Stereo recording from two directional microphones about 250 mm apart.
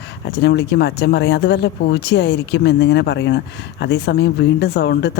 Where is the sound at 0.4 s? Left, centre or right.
Left.